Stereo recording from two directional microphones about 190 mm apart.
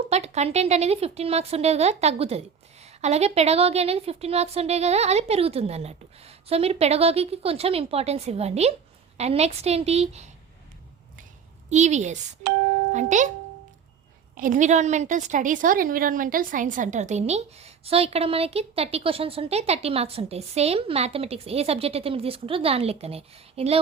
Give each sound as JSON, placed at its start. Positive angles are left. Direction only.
{"t": 0.1, "sound": "a woman's voice", "side_deg": -35}
{"t": 11.7, "sound": "a woman's voice", "side_deg": -40}
{"t": 14.3, "sound": "a woman's voice", "side_deg": -45}